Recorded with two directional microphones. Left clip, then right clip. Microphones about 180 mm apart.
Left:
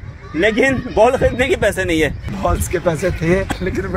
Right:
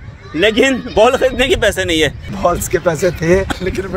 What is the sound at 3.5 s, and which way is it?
Speech, 60° right (ahead or behind).